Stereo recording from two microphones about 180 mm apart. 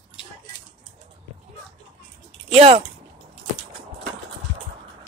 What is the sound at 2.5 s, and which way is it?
Speech, 35° right (ahead or behind).